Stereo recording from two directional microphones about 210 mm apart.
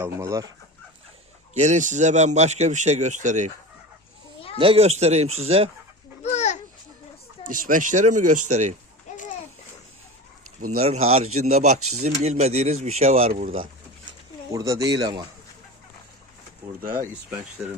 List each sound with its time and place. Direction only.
0.0 s speech: 15° right (ahead or behind)
1.5 s a man's voice: 35° right (ahead or behind)
4.5 s a man's voice: 25° right (ahead or behind)
6.2 s a sound: 35° left (ahead or behind)
7.4 s a man's voice: 40° right (ahead or behind)
10.8 s a man's voice: 30° right (ahead or behind)
11.8 s speech: 90° right
12.0 s a man's voice: 35° right (ahead or behind)
14.5 s speech: 15° right (ahead or behind)